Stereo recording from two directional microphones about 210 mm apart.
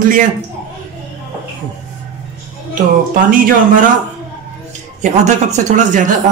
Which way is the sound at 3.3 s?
40° right (ahead or behind).